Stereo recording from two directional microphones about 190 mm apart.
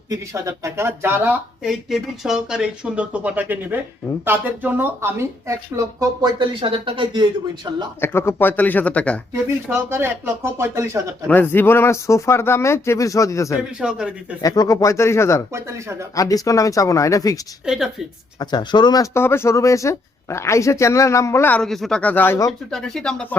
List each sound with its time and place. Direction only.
0.1 s speech: 15° right (ahead or behind)
8.0 s speech: 15° left (ahead or behind)
9.6 s speech: 10° right (ahead or behind)
11.3 s speech: 10° left (ahead or behind)
13.6 s speech: 5° right (ahead or behind)
14.4 s speech: 20° left (ahead or behind)
15.5 s speech: 15° right (ahead or behind)
16.1 s speech: 20° left (ahead or behind)
17.7 s speech: 5° right (ahead or behind)
18.3 s speech: 20° left (ahead or behind)
22.7 s speech: centre (ahead or behind)